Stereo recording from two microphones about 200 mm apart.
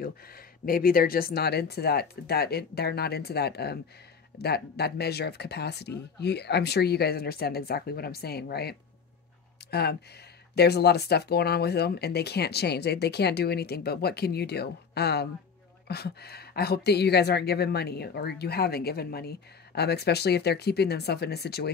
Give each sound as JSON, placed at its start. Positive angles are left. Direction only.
{"t": 0.7, "sound": "a woman's voice", "side_deg": 45}